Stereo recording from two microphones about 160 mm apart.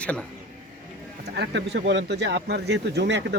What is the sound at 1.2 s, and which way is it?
Speech, 90° right.